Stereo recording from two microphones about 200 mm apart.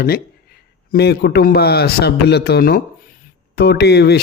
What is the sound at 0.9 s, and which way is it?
A man's voice, 55° left (ahead or behind).